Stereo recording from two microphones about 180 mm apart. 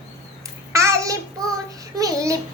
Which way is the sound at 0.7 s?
15° right (ahead or behind).